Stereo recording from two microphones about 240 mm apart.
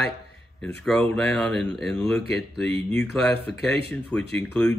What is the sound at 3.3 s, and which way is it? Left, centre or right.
Speech, left.